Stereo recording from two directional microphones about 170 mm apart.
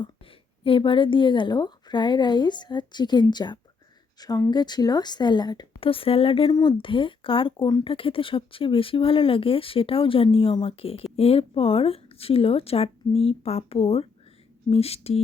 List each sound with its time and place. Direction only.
0.6 s a woman's voice: 30° left (ahead or behind)